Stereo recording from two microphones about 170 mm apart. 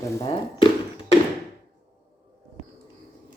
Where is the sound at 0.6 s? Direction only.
30° left (ahead or behind).